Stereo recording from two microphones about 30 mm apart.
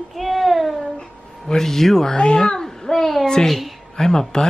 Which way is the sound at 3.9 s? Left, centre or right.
Centre.